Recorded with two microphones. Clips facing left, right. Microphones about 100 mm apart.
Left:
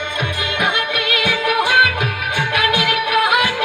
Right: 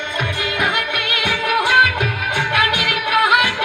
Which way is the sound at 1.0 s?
30° right (ahead or behind).